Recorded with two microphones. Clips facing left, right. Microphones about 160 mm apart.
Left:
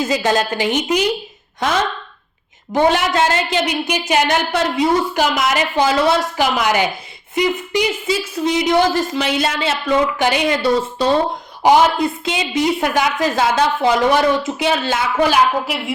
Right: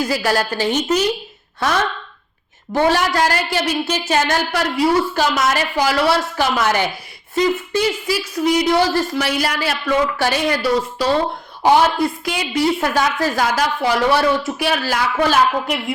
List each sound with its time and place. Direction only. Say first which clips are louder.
0.0 s speech: left 2 dB; 20° left (ahead or behind)
2.7 s a woman's voice: left 1 dB; 20° left (ahead or behind)
15.3 s a woman's voice: left 1 dB; 5° left (ahead or behind)